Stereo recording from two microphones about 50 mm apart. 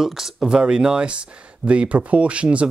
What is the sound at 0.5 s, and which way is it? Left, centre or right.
Speech, centre.